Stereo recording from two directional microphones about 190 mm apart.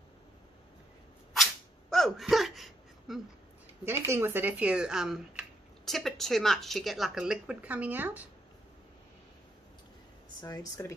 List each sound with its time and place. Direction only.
1.3 s whip: centre (ahead or behind)
3.8 s a woman's voice: 15° right (ahead or behind)
10.4 s speech: 20° left (ahead or behind)